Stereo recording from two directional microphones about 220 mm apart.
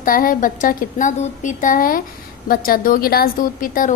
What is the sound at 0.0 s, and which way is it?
A woman's voice, 40° left (ahead or behind).